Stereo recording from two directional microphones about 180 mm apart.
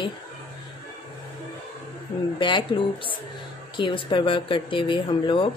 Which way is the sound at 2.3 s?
25° left (ahead or behind).